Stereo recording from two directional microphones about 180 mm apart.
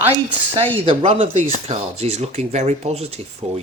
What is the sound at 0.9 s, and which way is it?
Speech, 30° right (ahead or behind).